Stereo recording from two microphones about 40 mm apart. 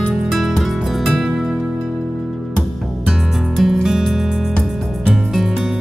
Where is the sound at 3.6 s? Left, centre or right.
Centre.